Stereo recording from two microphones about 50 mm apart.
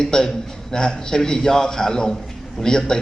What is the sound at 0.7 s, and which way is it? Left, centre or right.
A man's voice, centre.